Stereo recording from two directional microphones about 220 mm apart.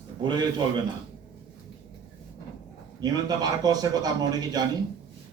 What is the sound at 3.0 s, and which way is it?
A man's voice, 15° right (ahead or behind).